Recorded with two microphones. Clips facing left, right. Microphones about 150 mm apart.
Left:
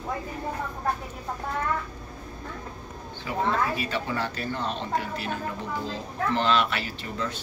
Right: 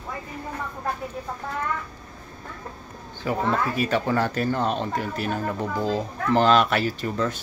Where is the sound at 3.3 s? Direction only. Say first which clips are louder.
Right 2 dB; 45° right (ahead or behind).